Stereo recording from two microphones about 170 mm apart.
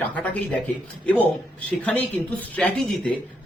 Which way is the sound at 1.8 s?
10° left (ahead or behind).